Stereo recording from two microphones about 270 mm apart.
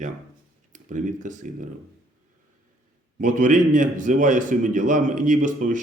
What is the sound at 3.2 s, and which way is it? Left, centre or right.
A man's voice, right.